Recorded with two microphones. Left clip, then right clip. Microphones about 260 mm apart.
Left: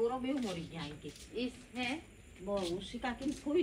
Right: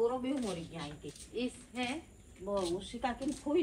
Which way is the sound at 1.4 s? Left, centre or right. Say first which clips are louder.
Right 2 dB; right.